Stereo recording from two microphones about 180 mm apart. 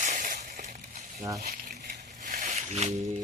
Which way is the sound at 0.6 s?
40° right (ahead or behind).